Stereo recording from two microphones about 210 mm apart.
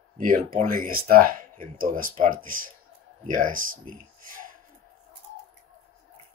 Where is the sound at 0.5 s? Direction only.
40° right (ahead or behind).